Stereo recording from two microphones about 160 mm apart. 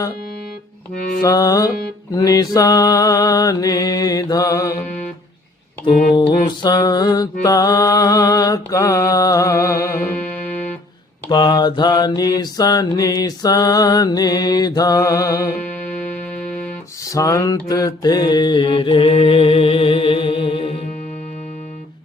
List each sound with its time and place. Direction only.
1.2 s mantra: 20° left (ahead or behind)
5.9 s a sound: 70° left (ahead or behind)
6.6 s mantra: 25° left (ahead or behind)
11.3 s mantra: 25° left (ahead or behind)
15.9 s music: 10° left (ahead or behind)
17.1 s mantra: 20° left (ahead or behind)